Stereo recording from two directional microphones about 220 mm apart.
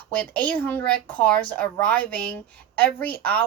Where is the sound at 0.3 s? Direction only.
5° left (ahead or behind).